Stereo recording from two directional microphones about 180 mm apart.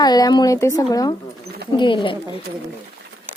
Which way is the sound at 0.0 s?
20° left (ahead or behind).